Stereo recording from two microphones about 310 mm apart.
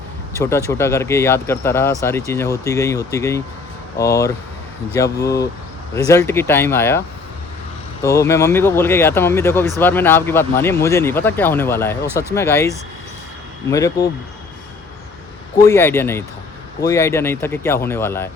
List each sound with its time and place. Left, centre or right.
0.3 s speech: centre
8.0 s speech: centre
15.5 s speech: centre